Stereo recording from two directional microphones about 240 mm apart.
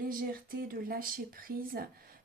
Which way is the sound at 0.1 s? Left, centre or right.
Right.